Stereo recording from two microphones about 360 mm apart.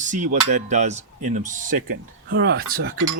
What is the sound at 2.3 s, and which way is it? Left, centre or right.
Speech, right.